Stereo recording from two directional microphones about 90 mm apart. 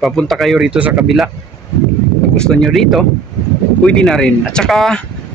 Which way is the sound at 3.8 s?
10° left (ahead or behind).